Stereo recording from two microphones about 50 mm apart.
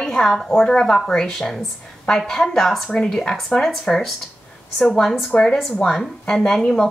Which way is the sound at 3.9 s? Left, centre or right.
Left.